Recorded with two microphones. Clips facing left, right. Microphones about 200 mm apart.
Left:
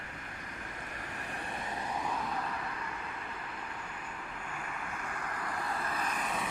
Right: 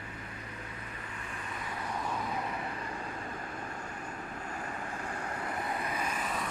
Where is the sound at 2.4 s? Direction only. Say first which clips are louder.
Right 2 dB; 25° right (ahead or behind).